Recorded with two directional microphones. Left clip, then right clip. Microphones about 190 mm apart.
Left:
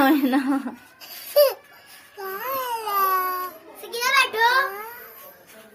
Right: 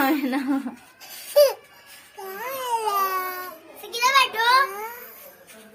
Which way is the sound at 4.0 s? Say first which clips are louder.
Even; 20° left (ahead or behind).